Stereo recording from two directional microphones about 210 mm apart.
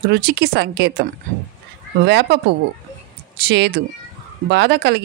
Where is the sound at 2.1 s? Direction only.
55° right (ahead or behind).